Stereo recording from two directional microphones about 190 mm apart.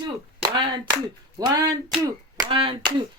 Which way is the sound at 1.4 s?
20° right (ahead or behind).